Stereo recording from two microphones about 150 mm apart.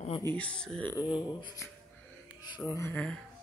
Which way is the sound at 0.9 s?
30° left (ahead or behind).